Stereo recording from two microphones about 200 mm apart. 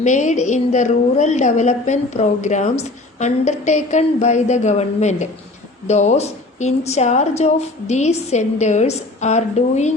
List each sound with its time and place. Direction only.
0.0 s a woman's voice: 40° left (ahead or behind)